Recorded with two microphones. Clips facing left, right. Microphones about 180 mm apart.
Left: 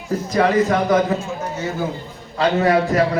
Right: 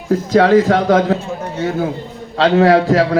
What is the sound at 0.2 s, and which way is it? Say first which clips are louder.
Speech: right 5 dB; 75° right (ahead or behind).